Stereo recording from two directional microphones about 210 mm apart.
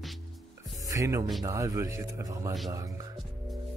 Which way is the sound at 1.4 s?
15° right (ahead or behind).